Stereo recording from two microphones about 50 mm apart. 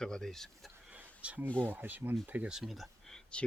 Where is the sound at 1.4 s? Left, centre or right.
Left.